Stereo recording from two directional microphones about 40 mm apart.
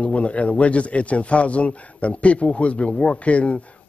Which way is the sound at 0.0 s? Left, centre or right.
Left.